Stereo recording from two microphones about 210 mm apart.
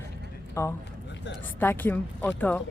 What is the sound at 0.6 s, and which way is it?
Speech, 15° left (ahead or behind).